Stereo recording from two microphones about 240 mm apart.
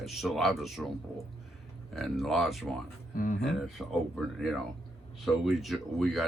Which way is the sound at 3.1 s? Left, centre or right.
Left.